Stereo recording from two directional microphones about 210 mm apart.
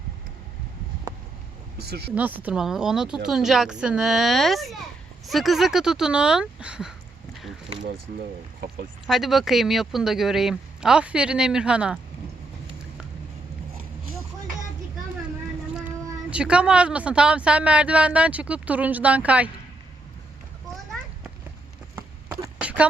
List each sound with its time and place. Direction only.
1.8 s speech: 50° right (ahead or behind)
2.1 s speech: 5° right (ahead or behind)
9.0 s speech: centre (ahead or behind)
16.3 s speech: 5° right (ahead or behind)
21.9 s a sound: 10° right (ahead or behind)